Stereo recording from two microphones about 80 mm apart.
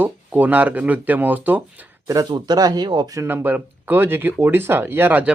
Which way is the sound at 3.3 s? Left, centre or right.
Right.